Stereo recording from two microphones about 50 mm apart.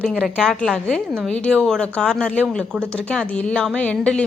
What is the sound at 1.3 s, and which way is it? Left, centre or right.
Speech, left.